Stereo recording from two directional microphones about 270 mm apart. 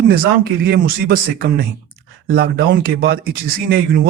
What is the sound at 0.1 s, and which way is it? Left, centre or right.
Speech, right.